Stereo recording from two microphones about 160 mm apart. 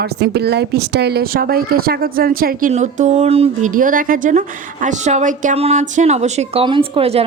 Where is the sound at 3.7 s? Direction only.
60° right (ahead or behind).